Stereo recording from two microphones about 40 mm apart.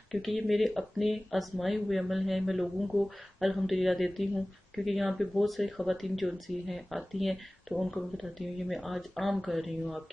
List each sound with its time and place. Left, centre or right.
0.1 s speech: centre